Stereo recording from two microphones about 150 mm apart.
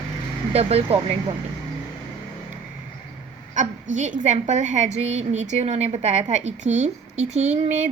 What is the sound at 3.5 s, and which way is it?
A woman's voice, 55° right (ahead or behind).